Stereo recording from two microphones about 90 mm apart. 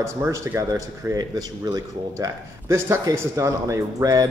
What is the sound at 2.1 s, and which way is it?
Speech, 35° right (ahead or behind).